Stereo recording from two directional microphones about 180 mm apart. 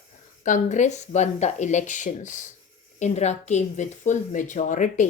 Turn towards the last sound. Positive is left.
turn(degrees=45)  # may be behind; listen again after turning